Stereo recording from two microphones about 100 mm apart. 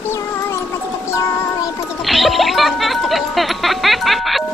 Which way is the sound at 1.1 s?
25° left (ahead or behind).